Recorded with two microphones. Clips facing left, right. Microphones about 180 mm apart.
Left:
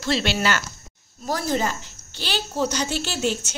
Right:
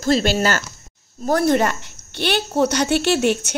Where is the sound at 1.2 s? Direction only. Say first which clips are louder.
Right 7 dB; 60° right (ahead or behind).